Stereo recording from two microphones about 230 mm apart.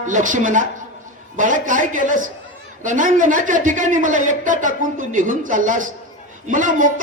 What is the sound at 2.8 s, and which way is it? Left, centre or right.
Speech, right.